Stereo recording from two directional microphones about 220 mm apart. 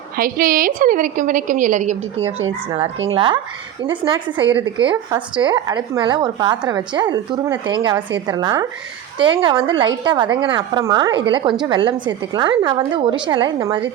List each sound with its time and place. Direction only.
0.2 s a woman's voice: 40° right (ahead or behind); by 13.8 s 20° right (ahead or behind)